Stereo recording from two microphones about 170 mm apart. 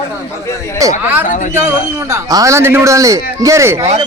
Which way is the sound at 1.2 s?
50° left (ahead or behind).